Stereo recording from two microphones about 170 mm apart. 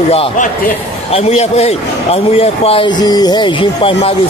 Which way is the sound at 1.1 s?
35° left (ahead or behind).